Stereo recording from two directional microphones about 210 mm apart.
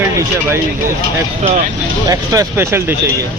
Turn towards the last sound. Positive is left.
turn(degrees=-15)  # may be behind; listen again after turning